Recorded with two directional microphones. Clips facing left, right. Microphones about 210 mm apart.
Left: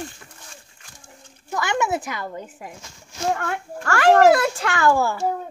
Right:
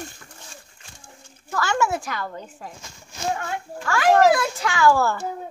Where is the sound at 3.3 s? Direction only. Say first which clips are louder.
Left 2 dB; 70° left (ahead or behind).